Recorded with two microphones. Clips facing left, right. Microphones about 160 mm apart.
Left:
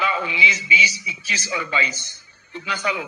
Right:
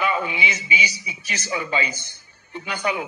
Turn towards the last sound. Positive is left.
turn(degrees=-50)  # may be behind; listen again after turning